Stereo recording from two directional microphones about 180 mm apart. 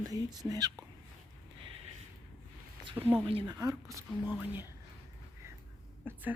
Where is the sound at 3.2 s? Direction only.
25° right (ahead or behind); by 4.7 s 10° right (ahead or behind).